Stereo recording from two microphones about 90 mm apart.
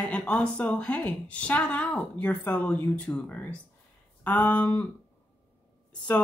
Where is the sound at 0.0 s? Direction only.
10° left (ahead or behind).